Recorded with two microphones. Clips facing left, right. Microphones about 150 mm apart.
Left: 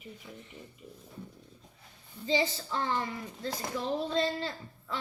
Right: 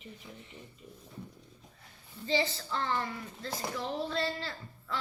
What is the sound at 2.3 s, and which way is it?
Speech, 15° left (ahead or behind).